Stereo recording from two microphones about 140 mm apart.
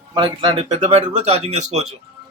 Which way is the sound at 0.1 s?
35° right (ahead or behind).